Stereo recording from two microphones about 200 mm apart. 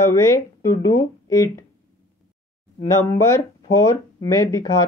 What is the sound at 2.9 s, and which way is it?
Speech, 15° left (ahead or behind).